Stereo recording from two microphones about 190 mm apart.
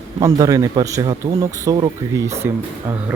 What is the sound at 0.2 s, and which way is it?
Speech, 15° right (ahead or behind).